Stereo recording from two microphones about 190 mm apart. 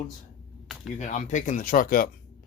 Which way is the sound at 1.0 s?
40° left (ahead or behind).